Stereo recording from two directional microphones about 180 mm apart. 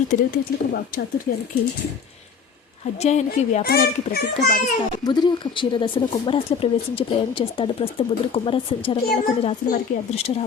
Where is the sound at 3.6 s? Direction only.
60° left (ahead or behind).